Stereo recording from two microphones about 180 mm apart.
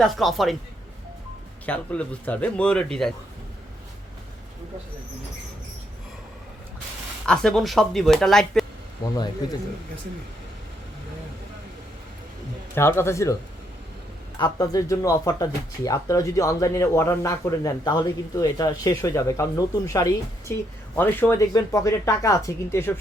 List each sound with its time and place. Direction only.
0.0 s speech: centre (ahead or behind)
1.6 s speech: 10° left (ahead or behind)
7.3 s speech: centre (ahead or behind)
12.7 s speech: 15° left (ahead or behind)
14.3 s speech: 20° left (ahead or behind)